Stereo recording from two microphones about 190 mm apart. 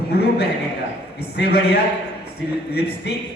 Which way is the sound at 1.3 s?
55° left (ahead or behind).